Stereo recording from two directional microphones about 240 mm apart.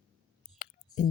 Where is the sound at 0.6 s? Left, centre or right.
Left.